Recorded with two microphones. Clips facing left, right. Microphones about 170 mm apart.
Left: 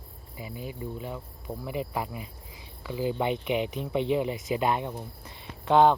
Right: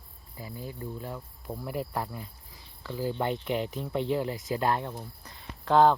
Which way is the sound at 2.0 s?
10° left (ahead or behind).